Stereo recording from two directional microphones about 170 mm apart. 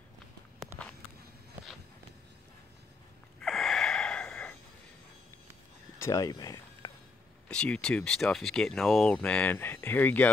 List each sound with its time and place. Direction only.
3.3 s gasp: centre (ahead or behind)
5.9 s a sound: 20° left (ahead or behind)
7.4 s speech: 5° left (ahead or behind)